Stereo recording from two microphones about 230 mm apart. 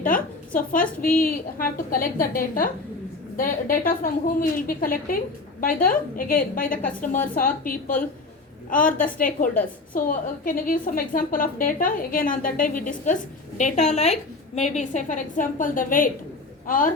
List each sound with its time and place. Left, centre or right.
0.0 s a woman's voice: left